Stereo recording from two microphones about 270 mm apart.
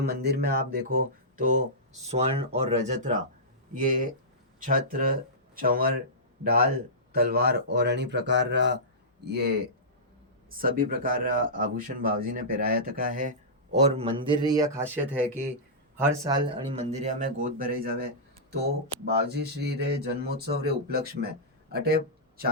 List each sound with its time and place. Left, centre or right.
0.0 s speech: right; by 14.8 s centre
16.0 s speech: centre
16.6 s speech: right
21.7 s a sound: right